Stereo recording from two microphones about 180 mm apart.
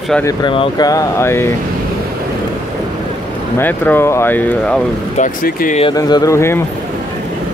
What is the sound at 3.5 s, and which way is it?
Speech, 10° left (ahead or behind).